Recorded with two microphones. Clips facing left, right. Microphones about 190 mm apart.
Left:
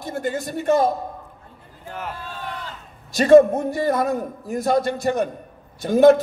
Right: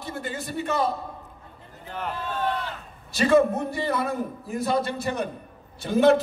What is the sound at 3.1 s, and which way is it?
A man's voice, 45° left (ahead or behind).